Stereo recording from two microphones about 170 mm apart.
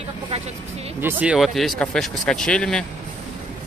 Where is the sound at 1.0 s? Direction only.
5° right (ahead or behind).